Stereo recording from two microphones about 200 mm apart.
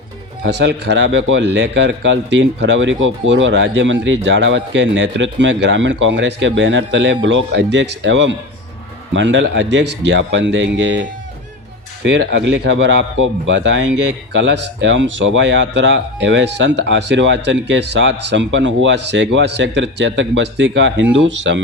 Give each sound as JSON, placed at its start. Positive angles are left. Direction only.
{"t": 0.4, "sound": "a man's voice", "side_deg": -60}
{"t": 12.0, "sound": "a man's voice", "side_deg": -60}